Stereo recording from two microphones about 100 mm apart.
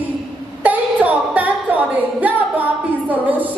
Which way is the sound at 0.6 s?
15° right (ahead or behind).